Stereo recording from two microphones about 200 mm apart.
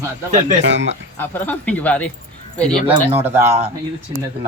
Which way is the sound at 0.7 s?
65° right (ahead or behind).